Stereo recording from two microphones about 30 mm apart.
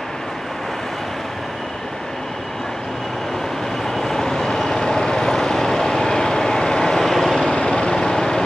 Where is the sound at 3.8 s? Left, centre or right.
Centre.